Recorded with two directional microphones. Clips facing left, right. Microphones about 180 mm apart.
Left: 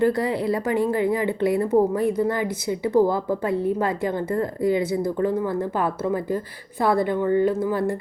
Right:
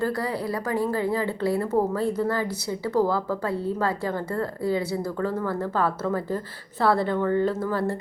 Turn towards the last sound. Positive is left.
turn(degrees=15)  # may be behind; listen again after turning